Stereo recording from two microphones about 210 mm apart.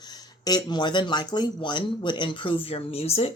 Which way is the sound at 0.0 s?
20° left (ahead or behind).